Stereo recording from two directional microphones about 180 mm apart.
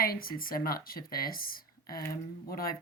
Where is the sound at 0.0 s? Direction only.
55° left (ahead or behind).